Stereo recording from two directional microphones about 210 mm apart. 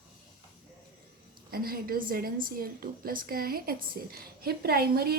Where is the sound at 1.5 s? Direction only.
45° right (ahead or behind).